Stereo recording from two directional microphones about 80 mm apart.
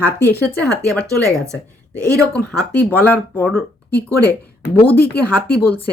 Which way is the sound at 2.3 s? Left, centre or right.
Centre.